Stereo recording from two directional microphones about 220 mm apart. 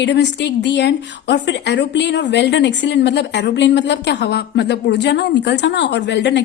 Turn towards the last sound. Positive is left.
turn(degrees=50)  # may be behind; listen again after turning